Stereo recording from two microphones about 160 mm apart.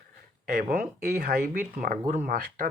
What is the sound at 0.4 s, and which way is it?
Speech, 65° right (ahead or behind).